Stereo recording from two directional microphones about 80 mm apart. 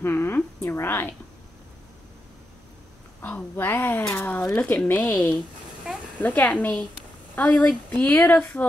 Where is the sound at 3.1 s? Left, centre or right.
Left.